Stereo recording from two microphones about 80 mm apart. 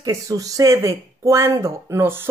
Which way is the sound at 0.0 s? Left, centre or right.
Right.